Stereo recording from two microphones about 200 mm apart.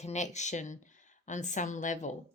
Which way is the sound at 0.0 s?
35° left (ahead or behind).